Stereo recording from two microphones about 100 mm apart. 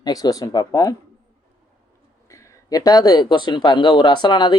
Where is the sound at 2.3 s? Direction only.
35° left (ahead or behind).